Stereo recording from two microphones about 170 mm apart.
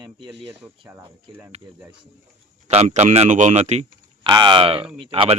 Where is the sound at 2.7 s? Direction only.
40° right (ahead or behind).